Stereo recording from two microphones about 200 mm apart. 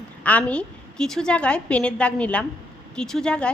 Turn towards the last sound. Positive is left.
turn(degrees=5)  # may be behind; listen again after turning